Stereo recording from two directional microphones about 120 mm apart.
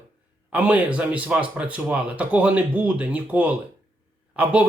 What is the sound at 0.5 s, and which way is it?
Speech, 15° right (ahead or behind).